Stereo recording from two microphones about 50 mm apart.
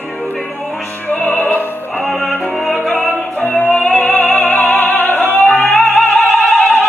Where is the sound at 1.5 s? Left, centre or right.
Left.